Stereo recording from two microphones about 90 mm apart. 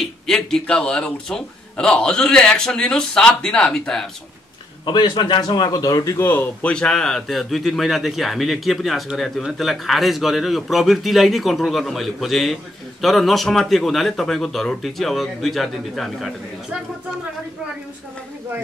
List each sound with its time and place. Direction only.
0.0 s speech: 5° left (ahead or behind)
4.8 s a man's voice: 55° left (ahead or behind)
6.1 s speech: 25° left (ahead or behind)
6.7 s a man's voice: 10° left (ahead or behind)